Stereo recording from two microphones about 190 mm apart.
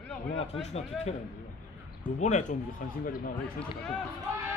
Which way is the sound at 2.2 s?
40° left (ahead or behind).